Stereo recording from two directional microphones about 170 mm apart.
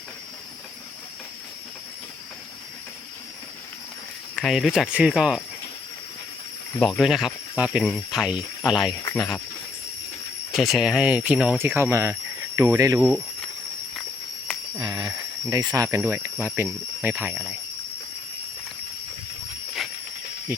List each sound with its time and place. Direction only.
4.4 s speech: centre (ahead or behind)
6.7 s speech: centre (ahead or behind)
10.5 s speech: centre (ahead or behind)
14.8 s speech: 20° right (ahead or behind)
20.5 s speech: 10° right (ahead or behind)